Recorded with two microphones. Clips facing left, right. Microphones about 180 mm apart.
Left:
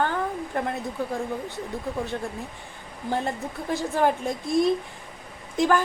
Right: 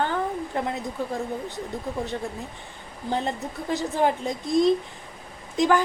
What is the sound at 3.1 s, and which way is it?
A woman's voice, 20° right (ahead or behind).